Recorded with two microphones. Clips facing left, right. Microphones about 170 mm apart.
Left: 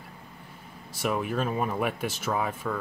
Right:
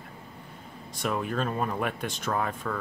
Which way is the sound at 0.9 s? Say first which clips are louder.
Left 1 dB; 5° left (ahead or behind).